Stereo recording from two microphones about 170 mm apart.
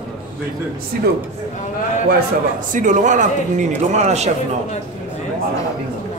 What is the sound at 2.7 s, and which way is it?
A man's voice, 50° right (ahead or behind).